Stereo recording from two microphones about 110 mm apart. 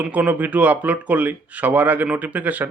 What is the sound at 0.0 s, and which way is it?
Speech, 15° right (ahead or behind).